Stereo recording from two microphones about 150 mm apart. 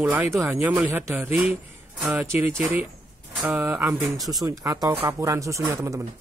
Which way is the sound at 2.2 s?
15° right (ahead or behind).